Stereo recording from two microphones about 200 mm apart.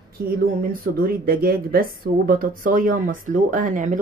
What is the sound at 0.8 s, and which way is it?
A woman's voice, 45° right (ahead or behind).